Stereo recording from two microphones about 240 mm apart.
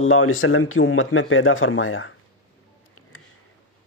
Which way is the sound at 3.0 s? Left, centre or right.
Left.